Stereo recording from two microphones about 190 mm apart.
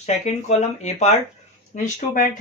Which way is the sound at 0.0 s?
35° left (ahead or behind).